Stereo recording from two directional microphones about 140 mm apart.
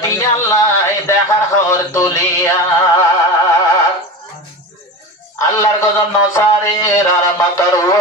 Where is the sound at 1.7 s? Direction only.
20° left (ahead or behind).